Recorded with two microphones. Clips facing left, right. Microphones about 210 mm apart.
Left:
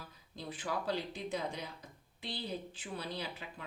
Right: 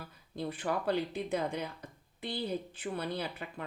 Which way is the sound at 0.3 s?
60° right (ahead or behind).